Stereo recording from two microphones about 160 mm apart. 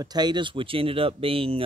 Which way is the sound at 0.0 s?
25° right (ahead or behind).